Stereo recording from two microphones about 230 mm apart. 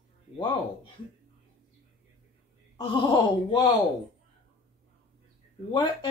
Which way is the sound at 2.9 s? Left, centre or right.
Centre.